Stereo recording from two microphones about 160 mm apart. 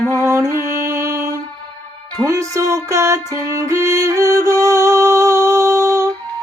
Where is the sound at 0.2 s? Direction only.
20° right (ahead or behind).